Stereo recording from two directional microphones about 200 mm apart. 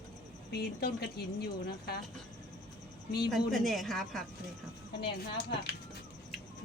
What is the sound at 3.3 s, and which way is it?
Speech, centre (ahead or behind).